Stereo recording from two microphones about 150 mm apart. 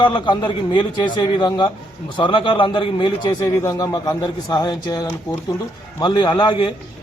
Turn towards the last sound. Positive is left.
turn(degrees=30)  # may be behind; listen again after turning